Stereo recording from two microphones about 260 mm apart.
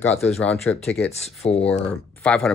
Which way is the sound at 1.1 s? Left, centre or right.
Left.